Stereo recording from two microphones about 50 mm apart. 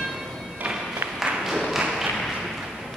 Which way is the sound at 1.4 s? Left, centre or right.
Centre.